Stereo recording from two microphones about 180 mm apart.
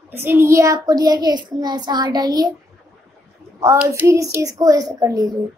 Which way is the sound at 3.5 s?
15° right (ahead or behind).